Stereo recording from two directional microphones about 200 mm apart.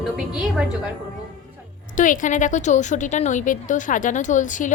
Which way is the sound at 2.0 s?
40° left (ahead or behind).